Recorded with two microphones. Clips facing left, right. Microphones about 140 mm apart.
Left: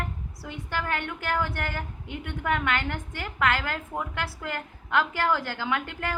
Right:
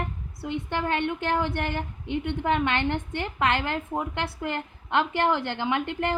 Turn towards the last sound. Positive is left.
turn(degrees=-20)  # may be behind; listen again after turning